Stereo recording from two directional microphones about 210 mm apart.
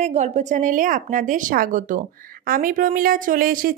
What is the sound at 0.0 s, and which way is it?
A woman's voice, 30° right (ahead or behind).